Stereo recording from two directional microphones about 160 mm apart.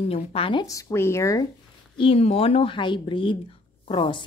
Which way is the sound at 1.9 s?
35° left (ahead or behind).